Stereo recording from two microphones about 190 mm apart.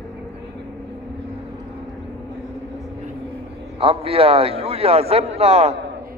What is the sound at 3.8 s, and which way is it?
A man's voice, 30° right (ahead or behind).